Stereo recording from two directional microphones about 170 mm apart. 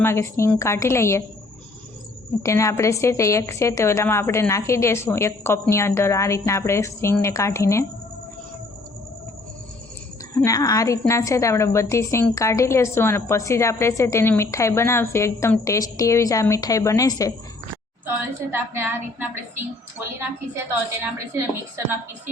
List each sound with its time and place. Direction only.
0.0 s a woman's voice: 15° left (ahead or behind)
2.4 s a woman's voice: 15° left (ahead or behind)
10.3 s a woman's voice: 20° left (ahead or behind)
18.5 s a woman's voice: 10° right (ahead or behind)
21.0 s a woman's voice: 15° right (ahead or behind)